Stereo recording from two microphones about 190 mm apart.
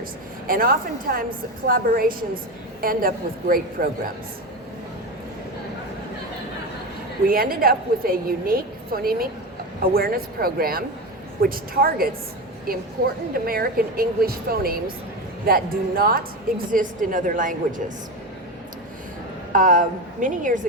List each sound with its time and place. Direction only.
0.4 s a woman's voice: 50° right (ahead or behind)
7.3 s a woman's voice: 50° right (ahead or behind)
13.3 s a woman's voice: 50° right (ahead or behind)
19.5 s a woman's voice: 45° right (ahead or behind)